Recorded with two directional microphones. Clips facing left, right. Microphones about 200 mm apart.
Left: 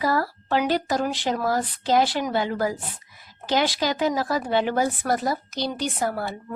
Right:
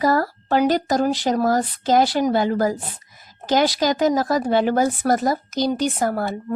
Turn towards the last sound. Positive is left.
turn(degrees=-45)  # may be behind; listen again after turning